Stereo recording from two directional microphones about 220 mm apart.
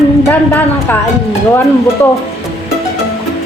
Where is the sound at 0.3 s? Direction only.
10° left (ahead or behind).